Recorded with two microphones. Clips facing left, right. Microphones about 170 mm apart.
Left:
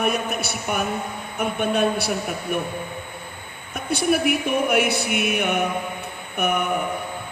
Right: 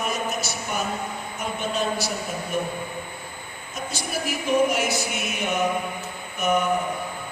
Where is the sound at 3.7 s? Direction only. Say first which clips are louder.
Left 10 dB; 60° left (ahead or behind).